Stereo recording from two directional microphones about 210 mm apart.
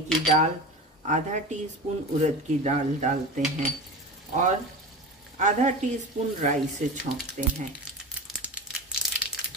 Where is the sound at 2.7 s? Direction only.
35° right (ahead or behind).